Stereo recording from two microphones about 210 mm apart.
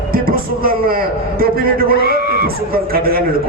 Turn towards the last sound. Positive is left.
turn(degrees=-45)  # may be behind; listen again after turning